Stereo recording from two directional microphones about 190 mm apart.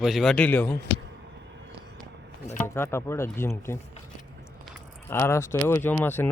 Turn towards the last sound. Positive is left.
turn(degrees=10)  # may be behind; listen again after turning